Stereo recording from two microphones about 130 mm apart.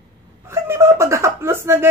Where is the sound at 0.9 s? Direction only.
20° right (ahead or behind).